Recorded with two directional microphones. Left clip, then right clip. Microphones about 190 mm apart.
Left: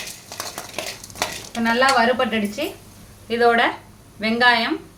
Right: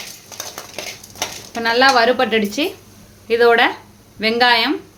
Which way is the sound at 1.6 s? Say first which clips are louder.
Right 4 dB; 55° right (ahead or behind).